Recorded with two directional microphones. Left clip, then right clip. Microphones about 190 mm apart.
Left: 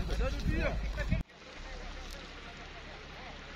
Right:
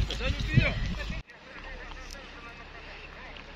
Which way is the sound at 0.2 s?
30° left (ahead or behind).